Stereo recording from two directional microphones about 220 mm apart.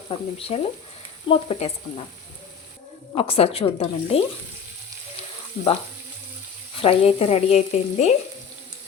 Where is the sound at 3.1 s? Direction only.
25° left (ahead or behind).